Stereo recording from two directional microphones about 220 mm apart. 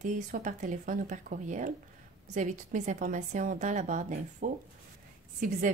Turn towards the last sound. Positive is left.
turn(degrees=-35)  # may be behind; listen again after turning